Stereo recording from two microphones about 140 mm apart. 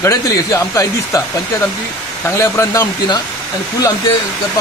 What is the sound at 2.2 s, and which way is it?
Speech, 20° left (ahead or behind).